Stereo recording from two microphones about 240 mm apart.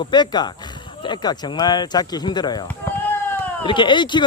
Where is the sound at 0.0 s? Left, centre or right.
Centre.